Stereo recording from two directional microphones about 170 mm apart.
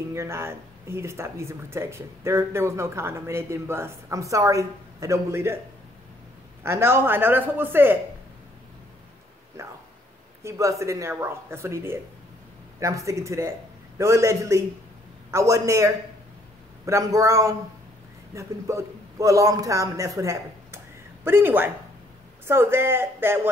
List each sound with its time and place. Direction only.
0.1 s speech: 15° right (ahead or behind)
6.6 s speech: 15° right (ahead or behind)
9.6 s a man's voice: 15° right (ahead or behind)